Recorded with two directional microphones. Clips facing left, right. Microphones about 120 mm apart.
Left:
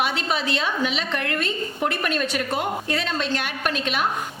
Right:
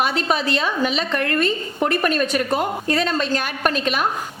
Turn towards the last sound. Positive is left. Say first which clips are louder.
# right 4 dB
turn(degrees=-45)  # may be behind; listen again after turning